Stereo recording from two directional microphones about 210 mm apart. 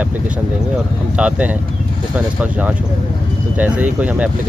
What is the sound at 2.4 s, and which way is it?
Speech, 10° right (ahead or behind).